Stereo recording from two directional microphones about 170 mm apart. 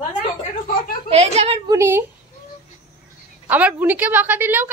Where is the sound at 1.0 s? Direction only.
35° right (ahead or behind).